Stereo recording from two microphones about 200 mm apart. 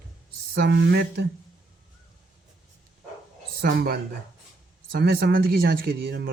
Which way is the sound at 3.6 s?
50° right (ahead or behind).